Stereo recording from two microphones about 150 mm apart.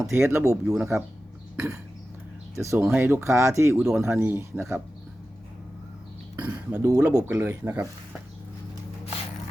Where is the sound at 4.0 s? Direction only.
15° right (ahead or behind).